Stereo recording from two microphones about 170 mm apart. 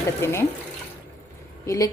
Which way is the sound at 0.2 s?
15° left (ahead or behind).